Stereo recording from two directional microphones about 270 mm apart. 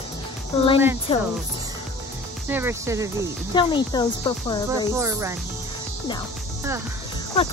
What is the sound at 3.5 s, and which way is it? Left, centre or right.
Speech, centre.